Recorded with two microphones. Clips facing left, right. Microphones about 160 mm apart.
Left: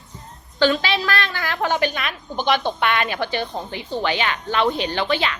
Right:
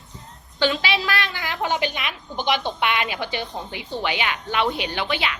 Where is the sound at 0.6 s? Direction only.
15° right (ahead or behind).